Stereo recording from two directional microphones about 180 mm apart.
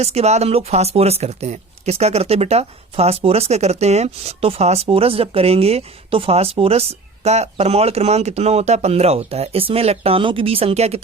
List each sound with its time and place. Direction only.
0.0 s speech: 35° right (ahead or behind)